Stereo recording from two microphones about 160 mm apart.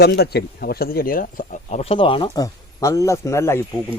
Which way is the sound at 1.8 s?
35° left (ahead or behind).